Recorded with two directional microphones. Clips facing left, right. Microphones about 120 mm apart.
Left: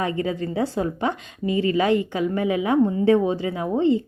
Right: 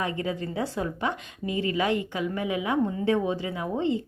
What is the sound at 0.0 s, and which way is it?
A woman's voice, 30° left (ahead or behind).